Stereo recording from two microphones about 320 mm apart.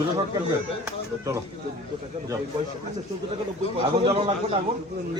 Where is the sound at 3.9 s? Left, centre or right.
Centre.